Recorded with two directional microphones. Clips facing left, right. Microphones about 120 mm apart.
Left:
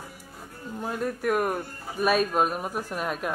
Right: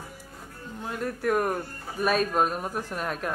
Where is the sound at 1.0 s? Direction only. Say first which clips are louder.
Even; 10° left (ahead or behind).